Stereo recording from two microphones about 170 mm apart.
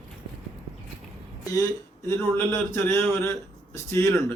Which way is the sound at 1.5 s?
15° left (ahead or behind).